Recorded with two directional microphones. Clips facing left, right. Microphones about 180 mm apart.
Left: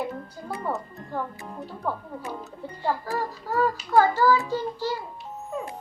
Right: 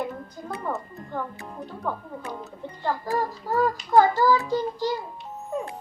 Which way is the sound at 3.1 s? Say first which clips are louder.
Right 3 dB; 15° right (ahead or behind).